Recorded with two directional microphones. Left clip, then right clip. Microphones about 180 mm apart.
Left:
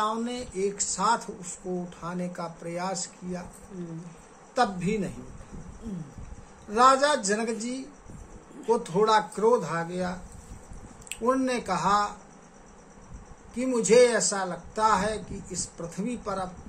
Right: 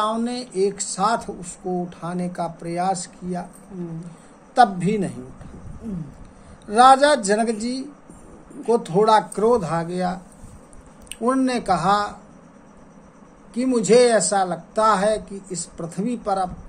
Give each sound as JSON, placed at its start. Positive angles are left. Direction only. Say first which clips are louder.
{"t": 0.0, "sound": "speech", "louder": "right 5 dB", "side_deg": -30}
{"t": 4.6, "sound": "a woman's voice", "louder": "right 9 dB", "side_deg": -30}
{"t": 6.7, "sound": "speech", "louder": "right 7 dB", "side_deg": -30}
{"t": 11.2, "sound": "speech", "louder": "right 6 dB", "side_deg": -25}
{"t": 13.6, "sound": "speech", "louder": "right 4 dB", "side_deg": -25}